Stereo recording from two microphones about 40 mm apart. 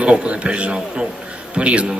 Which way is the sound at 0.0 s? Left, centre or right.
Right.